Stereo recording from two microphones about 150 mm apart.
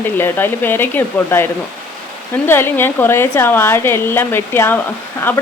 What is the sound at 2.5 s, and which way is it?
A woman's voice, 15° left (ahead or behind).